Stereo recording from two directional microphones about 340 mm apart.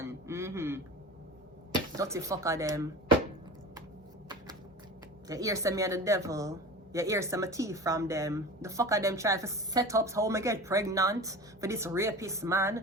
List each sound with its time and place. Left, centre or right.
0.0 s a sound: centre
2.0 s a woman's voice: centre
5.3 s a woman's voice: centre